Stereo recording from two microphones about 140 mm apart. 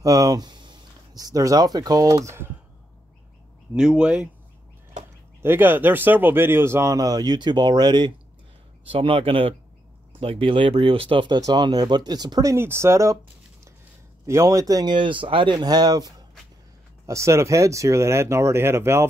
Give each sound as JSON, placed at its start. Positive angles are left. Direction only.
{"t": 0.0, "sound": "speech", "side_deg": -25}
{"t": 3.7, "sound": "speech", "side_deg": -5}
{"t": 5.4, "sound": "speech", "side_deg": -15}
{"t": 14.2, "sound": "speech", "side_deg": -20}